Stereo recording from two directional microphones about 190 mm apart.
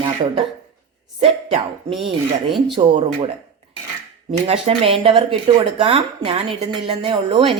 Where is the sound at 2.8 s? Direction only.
30° right (ahead or behind).